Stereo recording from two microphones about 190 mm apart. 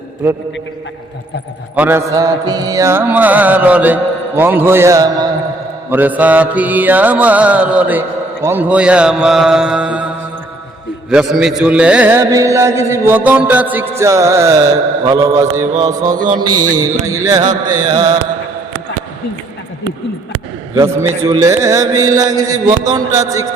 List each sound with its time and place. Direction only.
1.7 s a man's voice: 10° right (ahead or behind)
5.9 s a man's voice: 10° right (ahead or behind)
11.1 s a man's voice: 5° right (ahead or behind)
15.8 s mantra: 20° right (ahead or behind)
20.7 s a man's voice: 15° right (ahead or behind)
21.2 s mantra: 15° right (ahead or behind)